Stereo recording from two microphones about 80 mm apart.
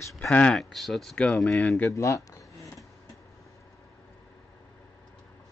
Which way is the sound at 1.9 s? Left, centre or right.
Left.